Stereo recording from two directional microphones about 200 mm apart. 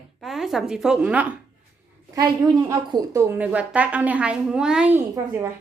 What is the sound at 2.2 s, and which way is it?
A woman's voice, 20° right (ahead or behind).